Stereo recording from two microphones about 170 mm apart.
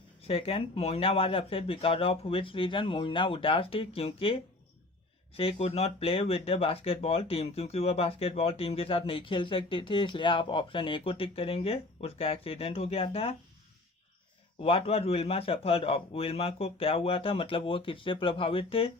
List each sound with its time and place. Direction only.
0.2 s speech: 35° left (ahead or behind)
14.6 s speech: 35° left (ahead or behind)